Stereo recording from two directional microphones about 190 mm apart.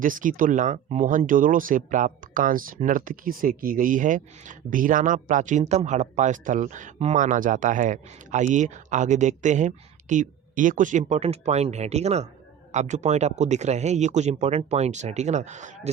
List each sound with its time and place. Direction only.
0.0 s speech: 45° right (ahead or behind)